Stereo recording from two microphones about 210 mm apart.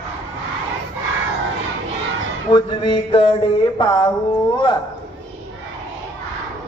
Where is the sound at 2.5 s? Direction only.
25° left (ahead or behind).